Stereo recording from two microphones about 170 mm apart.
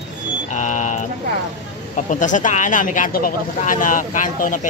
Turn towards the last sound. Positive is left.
turn(degrees=50)  # may be behind; listen again after turning